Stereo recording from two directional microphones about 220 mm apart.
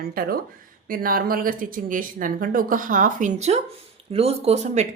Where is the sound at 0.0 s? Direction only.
45° right (ahead or behind).